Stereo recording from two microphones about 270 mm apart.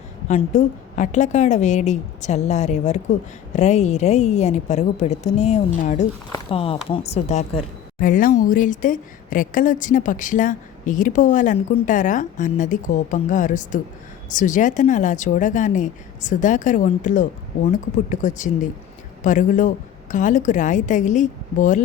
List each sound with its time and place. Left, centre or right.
0.3 s a woman's voice: left